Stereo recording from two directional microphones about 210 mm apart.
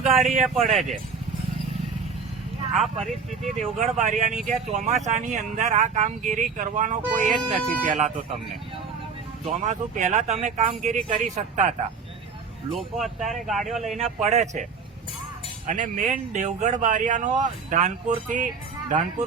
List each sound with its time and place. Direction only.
0.0 s speech: 30° right (ahead or behind)
0.4 s speech: centre (ahead or behind)
2.7 s speech: centre (ahead or behind)
3.8 s speech: 35° right (ahead or behind)
9.4 s speech: 35° right (ahead or behind)
12.7 s speech: centre (ahead or behind)
14.0 s speech: 30° right (ahead or behind)